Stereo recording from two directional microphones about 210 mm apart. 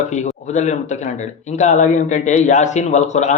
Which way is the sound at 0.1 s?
35° left (ahead or behind).